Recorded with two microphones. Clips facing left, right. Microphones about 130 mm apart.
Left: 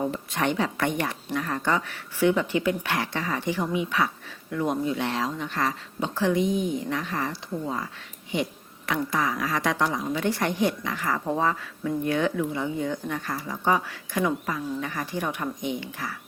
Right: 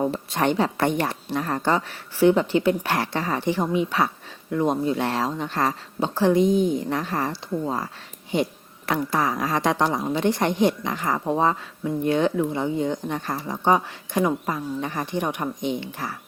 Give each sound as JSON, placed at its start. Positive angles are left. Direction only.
{"t": 0.0, "sound": "speech", "side_deg": -30}
{"t": 9.1, "sound": "a woman's voice", "side_deg": -30}